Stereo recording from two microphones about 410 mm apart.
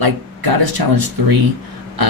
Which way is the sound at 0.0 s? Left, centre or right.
Right.